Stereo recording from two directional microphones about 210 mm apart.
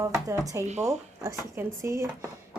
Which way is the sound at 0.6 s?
35° right (ahead or behind).